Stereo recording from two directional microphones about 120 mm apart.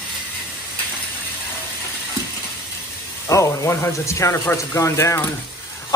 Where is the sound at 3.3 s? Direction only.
25° left (ahead or behind).